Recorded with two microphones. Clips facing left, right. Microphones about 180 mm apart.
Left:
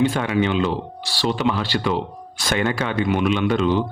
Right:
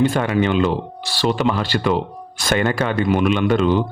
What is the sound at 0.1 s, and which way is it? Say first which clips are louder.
Speech: right 2 dB; 45° right (ahead or behind).